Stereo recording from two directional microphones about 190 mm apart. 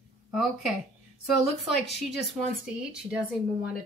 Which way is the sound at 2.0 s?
Centre (ahead or behind).